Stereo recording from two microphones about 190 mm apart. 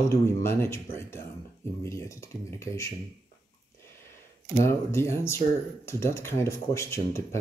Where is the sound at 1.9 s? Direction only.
15° left (ahead or behind).